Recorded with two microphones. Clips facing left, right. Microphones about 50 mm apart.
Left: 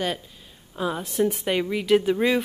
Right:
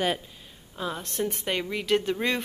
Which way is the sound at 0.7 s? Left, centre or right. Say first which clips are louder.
Left 5 dB; centre.